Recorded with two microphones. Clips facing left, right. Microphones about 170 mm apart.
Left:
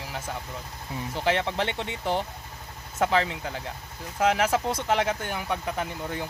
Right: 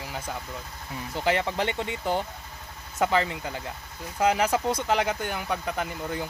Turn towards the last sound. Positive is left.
turn(degrees=0)  # may be behind; listen again after turning